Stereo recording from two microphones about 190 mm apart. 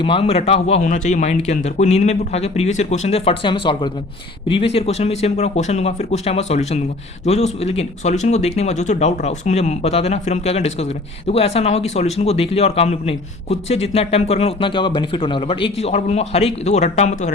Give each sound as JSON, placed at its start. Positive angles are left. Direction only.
{"t": 0.0, "sound": "speech", "side_deg": 30}